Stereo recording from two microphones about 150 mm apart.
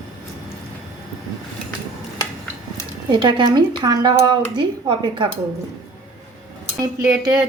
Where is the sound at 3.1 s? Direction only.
30° right (ahead or behind).